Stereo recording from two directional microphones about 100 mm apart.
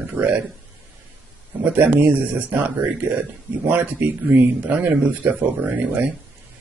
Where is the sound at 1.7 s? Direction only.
20° right (ahead or behind).